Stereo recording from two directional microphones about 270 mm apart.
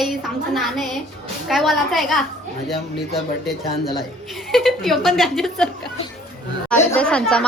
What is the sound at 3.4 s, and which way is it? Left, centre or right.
A woman's voice, centre.